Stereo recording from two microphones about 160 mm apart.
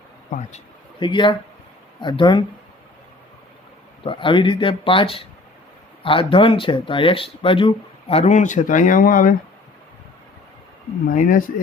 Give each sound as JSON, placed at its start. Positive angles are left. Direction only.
{"t": 0.9, "sound": "speech", "side_deg": 30}
{"t": 4.0, "sound": "speech", "side_deg": 35}
{"t": 11.1, "sound": "speech", "side_deg": 55}